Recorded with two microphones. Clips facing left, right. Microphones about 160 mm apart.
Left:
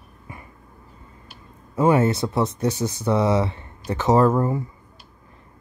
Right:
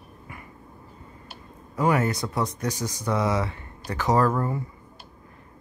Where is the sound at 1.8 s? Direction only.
25° left (ahead or behind).